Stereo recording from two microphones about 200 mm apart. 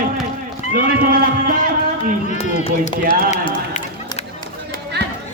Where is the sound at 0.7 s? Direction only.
45° right (ahead or behind).